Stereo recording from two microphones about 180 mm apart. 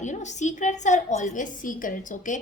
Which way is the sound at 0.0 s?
40° left (ahead or behind).